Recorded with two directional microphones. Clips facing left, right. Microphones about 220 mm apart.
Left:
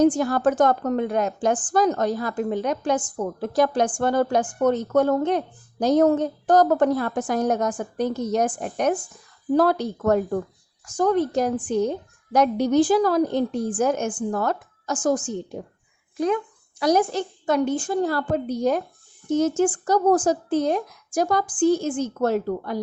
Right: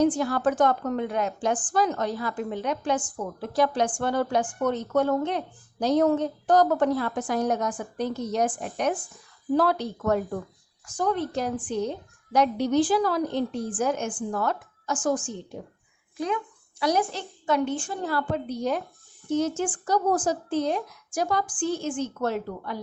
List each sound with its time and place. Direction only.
0.0 s a woman's voice: 45° left (ahead or behind)